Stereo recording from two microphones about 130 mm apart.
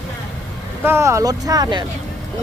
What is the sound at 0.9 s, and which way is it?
Speech, 20° right (ahead or behind).